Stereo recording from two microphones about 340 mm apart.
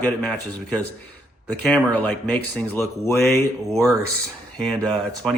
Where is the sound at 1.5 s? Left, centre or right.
Centre.